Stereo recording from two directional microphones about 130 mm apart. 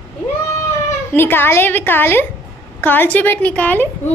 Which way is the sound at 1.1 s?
15° left (ahead or behind).